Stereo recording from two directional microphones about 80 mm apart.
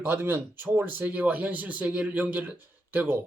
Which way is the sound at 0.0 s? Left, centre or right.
Right.